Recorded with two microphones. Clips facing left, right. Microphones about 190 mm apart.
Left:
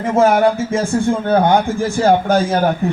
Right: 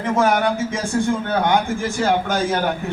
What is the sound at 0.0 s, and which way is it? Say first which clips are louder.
Speech: left 5 dB; 25° left (ahead or behind).